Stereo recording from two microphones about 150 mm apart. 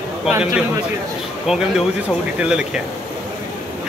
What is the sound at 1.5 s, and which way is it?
Speech, centre (ahead or behind).